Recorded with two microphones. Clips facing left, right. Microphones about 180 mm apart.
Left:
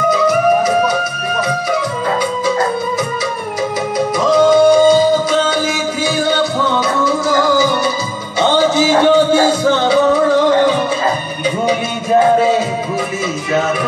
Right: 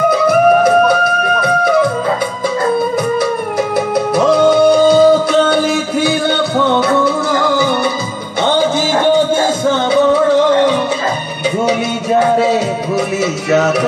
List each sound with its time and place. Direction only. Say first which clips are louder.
0.1 s music: right 3 dB; 60° right (ahead or behind)
4.3 s music: left 1 dB; 60° right (ahead or behind)